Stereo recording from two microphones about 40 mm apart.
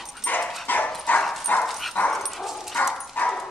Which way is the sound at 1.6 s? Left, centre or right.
Centre.